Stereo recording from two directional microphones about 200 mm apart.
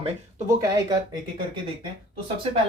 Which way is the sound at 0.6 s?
15° right (ahead or behind).